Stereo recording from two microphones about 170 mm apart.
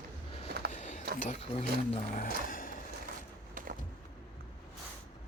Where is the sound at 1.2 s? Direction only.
40° left (ahead or behind).